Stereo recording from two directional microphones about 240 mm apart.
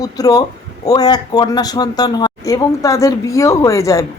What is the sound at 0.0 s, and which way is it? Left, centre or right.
Speech, centre.